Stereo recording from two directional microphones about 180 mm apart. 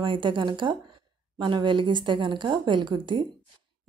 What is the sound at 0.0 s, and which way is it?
Speech, 25° right (ahead or behind).